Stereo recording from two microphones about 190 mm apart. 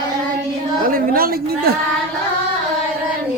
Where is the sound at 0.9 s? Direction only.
50° right (ahead or behind).